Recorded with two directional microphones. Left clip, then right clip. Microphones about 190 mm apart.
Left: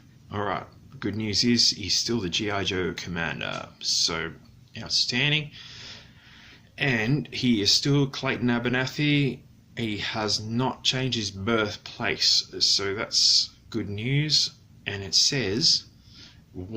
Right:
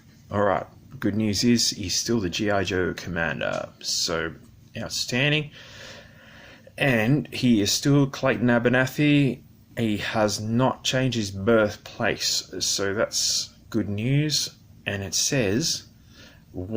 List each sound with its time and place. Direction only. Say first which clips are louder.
0.3 s speech: right 7 dB; 25° right (ahead or behind)